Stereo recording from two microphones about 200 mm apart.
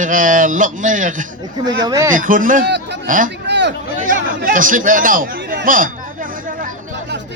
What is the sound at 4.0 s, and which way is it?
Speech, 40° right (ahead or behind).